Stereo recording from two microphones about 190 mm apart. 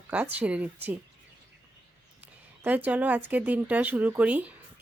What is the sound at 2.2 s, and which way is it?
Speech, 10° right (ahead or behind).